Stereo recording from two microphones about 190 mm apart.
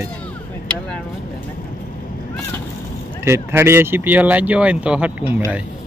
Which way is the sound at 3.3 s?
15° right (ahead or behind).